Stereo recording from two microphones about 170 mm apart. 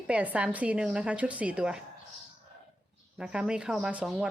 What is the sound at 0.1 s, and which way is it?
A woman's voice, 10° right (ahead or behind).